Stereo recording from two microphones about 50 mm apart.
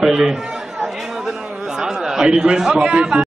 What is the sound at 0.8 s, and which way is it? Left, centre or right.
Chatter, centre.